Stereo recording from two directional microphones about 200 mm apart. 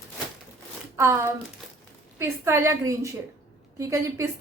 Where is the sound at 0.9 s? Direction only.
10° right (ahead or behind).